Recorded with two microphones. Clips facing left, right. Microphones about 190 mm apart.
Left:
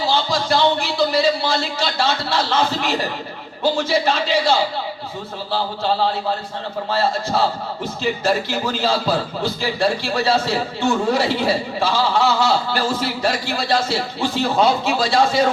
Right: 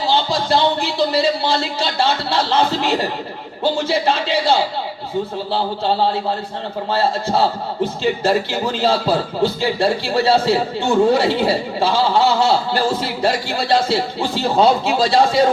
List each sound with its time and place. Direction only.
0.1 s a man's voice: 30° right (ahead or behind)